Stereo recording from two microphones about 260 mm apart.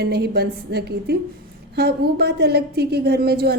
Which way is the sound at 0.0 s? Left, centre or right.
Right.